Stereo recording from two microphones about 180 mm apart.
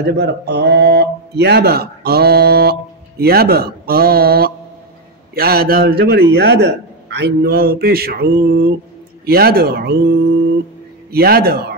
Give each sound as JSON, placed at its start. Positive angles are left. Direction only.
{"t": 0.0, "sound": "speech", "side_deg": -70}